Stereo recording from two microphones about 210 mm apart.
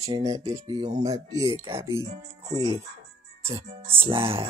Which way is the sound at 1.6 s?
25° right (ahead or behind).